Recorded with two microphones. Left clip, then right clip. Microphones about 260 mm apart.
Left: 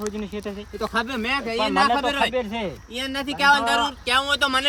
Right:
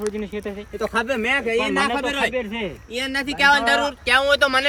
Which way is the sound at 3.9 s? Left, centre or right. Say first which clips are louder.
Right 4 dB; centre.